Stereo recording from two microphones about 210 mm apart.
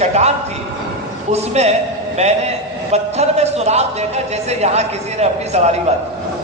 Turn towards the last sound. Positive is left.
turn(degrees=-30)  # may be behind; listen again after turning